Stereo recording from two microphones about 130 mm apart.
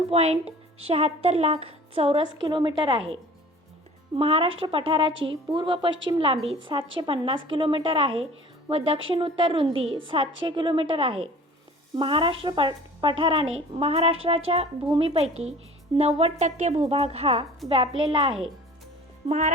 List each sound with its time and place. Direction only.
0.1 s speech: 50° right (ahead or behind)
2.3 s a woman's voice: 35° right (ahead or behind)
19.2 s music: 55° right (ahead or behind)